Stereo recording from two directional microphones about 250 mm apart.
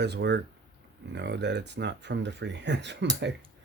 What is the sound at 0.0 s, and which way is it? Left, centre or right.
Speech, right.